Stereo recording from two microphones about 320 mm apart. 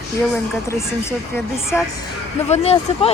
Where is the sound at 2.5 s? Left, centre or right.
Centre.